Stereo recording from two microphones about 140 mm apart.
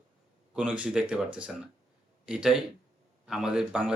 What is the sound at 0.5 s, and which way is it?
Speech, 10° right (ahead or behind).